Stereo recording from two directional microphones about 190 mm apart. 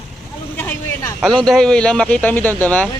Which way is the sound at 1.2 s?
Centre (ahead or behind).